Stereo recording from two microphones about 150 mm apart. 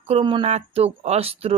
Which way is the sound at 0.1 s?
35° right (ahead or behind).